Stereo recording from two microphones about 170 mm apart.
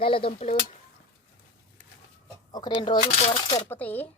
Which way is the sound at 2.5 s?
25° left (ahead or behind).